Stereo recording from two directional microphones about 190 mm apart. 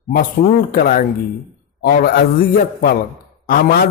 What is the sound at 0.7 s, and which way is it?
A man's voice, 45° left (ahead or behind).